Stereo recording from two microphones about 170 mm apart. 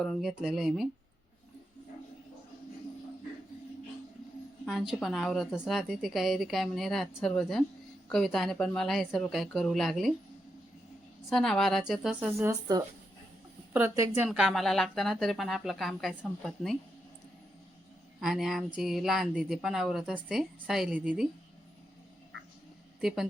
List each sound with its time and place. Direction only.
0.0 s a woman's voice: centre (ahead or behind)
4.6 s a woman's voice: centre (ahead or behind)
11.3 s a woman's voice: centre (ahead or behind)
12.4 s a woman's voice: 20° right (ahead or behind)
14.3 s a woman's voice: 5° right (ahead or behind)
18.2 s a woman's voice: centre (ahead or behind)
23.0 s speech: centre (ahead or behind)